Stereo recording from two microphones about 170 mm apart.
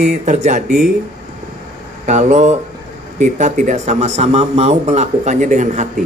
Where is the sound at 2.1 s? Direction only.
40° right (ahead or behind).